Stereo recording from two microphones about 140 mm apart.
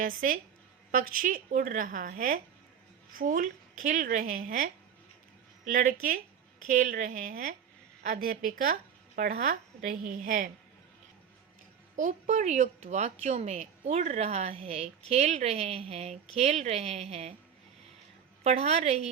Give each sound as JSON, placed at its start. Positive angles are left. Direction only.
{"t": 0.0, "sound": "a woman's voice", "side_deg": -80}
{"t": 5.6, "sound": "speech", "side_deg": -75}
{"t": 8.1, "sound": "speech", "side_deg": -80}
{"t": 10.2, "sound": "a woman's voice", "side_deg": -65}
{"t": 11.9, "sound": "speech", "side_deg": -60}
{"t": 18.4, "sound": "speech", "side_deg": -50}